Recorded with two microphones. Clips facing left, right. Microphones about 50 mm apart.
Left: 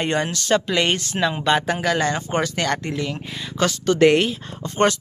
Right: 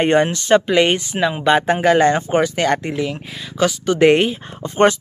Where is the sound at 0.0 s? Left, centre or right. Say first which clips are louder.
Right 7 dB; right.